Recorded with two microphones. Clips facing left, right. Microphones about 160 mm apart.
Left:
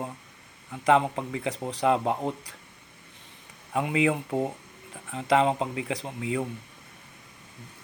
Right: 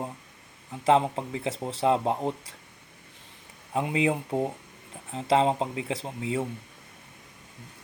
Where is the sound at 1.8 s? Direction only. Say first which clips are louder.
Even; 30° right (ahead or behind).